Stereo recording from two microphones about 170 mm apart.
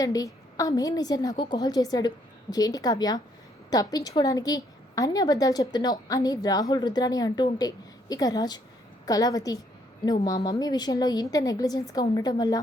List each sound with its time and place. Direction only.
0.0 s a woman's voice: 20° left (ahead or behind)